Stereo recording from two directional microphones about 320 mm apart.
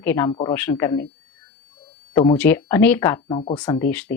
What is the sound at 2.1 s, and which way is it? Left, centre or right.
Speech, centre.